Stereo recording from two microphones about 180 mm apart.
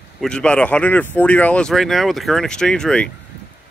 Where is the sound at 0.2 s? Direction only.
5° left (ahead or behind).